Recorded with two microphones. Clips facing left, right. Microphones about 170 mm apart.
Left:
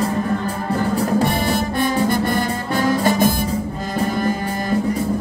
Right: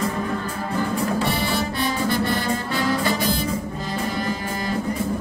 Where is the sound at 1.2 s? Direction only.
50° left (ahead or behind).